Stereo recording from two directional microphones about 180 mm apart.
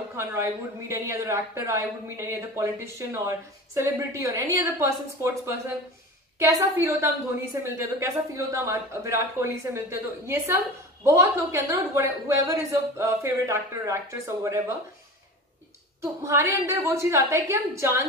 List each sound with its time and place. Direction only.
0.1 s a woman's voice: 15° right (ahead or behind)
16.0 s a woman's voice: 15° right (ahead or behind)